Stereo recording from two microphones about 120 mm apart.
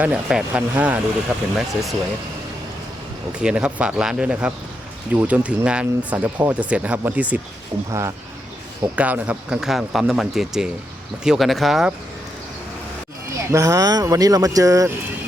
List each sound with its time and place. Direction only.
0.0 s speech: 10° right (ahead or behind)
1.5 s speech: centre (ahead or behind)
3.3 s speech: 10° right (ahead or behind)
7.9 s speech: 25° right (ahead or behind)
9.0 s speech: 10° right (ahead or behind)
13.3 s speech: 25° right (ahead or behind)